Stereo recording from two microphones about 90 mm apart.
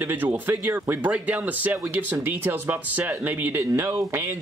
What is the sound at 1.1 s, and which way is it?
A man's voice, 15° right (ahead or behind).